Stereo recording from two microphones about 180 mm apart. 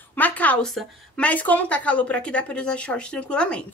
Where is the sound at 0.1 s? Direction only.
10° left (ahead or behind).